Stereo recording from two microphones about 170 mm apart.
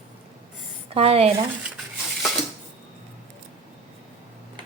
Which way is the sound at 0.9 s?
35° right (ahead or behind).